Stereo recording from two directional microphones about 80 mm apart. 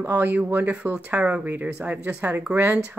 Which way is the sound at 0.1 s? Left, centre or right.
Centre.